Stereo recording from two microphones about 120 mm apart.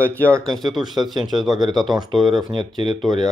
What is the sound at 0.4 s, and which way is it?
Speech, centre (ahead or behind).